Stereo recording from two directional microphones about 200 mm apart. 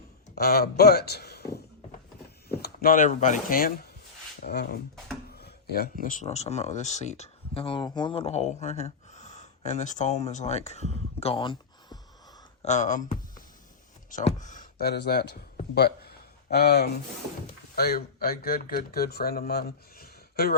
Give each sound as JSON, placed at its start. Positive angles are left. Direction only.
{"t": 0.3, "sound": "a sound", "side_deg": 50}
{"t": 2.5, "sound": "speech", "side_deg": 50}
{"t": 4.4, "sound": "speech", "side_deg": 55}
{"t": 12.6, "sound": "speech", "side_deg": 35}